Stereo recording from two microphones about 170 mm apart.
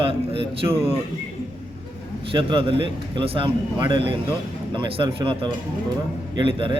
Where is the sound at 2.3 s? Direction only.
30° right (ahead or behind).